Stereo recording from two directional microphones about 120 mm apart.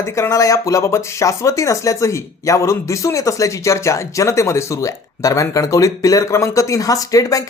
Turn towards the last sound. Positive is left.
turn(degrees=30)  # may be behind; listen again after turning